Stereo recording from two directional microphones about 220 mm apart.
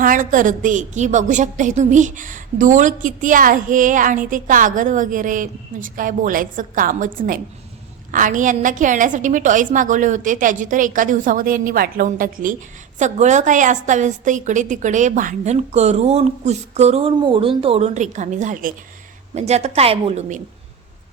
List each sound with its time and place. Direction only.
0.0 s a woman's voice: 35° right (ahead or behind)